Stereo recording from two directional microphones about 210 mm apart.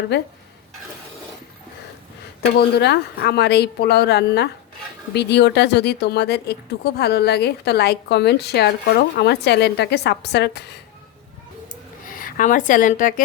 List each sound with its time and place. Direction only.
0.1 s speech: 55° left (ahead or behind)
2.6 s speech: 50° left (ahead or behind)
12.1 s a woman's voice: 40° left (ahead or behind)